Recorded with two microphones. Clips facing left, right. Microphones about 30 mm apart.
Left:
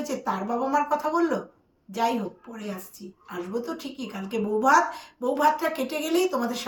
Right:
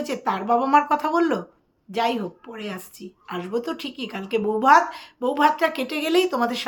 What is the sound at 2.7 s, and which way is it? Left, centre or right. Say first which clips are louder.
Speech: right 3 dB; right.